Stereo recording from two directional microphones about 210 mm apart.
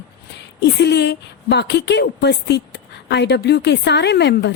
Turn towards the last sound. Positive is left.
turn(degrees=55)  # may be behind; listen again after turning